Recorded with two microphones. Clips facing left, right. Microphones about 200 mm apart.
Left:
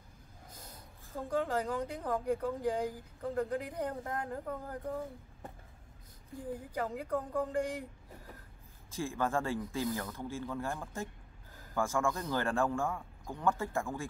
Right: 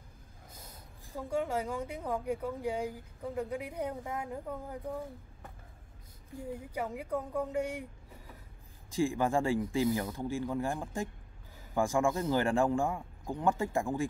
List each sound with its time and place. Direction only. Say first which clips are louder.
0.6 s a woman's voice: right 1 dB; 10° right (ahead or behind)
6.7 s speech: even; 10° right (ahead or behind)
8.9 s speech: right 5 dB; 15° right (ahead or behind)